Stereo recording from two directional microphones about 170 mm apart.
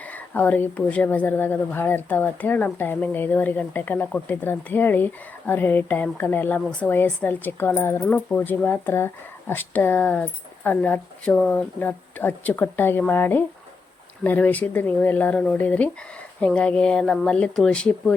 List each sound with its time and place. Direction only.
0.1 s speech: 10° left (ahead or behind)